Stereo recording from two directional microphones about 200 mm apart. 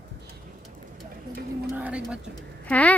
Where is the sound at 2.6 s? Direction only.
5° left (ahead or behind).